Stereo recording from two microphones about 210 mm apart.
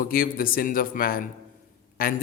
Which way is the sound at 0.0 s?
45° left (ahead or behind).